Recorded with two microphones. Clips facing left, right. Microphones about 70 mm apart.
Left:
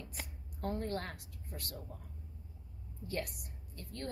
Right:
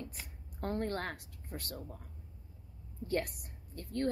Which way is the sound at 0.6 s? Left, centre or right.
Right.